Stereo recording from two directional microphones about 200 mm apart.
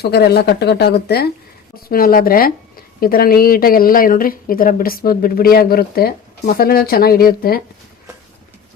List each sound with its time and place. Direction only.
0.0 s speech: 55° left (ahead or behind)